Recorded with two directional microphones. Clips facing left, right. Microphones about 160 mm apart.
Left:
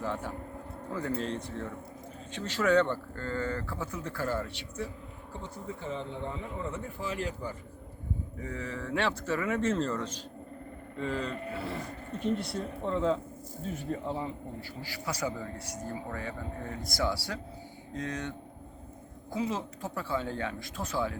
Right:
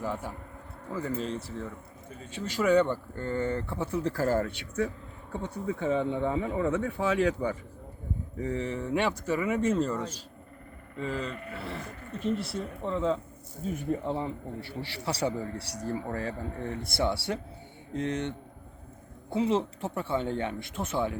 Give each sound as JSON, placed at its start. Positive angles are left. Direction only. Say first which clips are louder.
{"t": 0.0, "sound": "a man's voice", "louder": "even", "side_deg": -10}
{"t": 8.4, "sound": "speech", "louder": "right 8 dB", "side_deg": -30}
{"t": 13.7, "sound": "a man's voice", "louder": "right 4 dB", "side_deg": -20}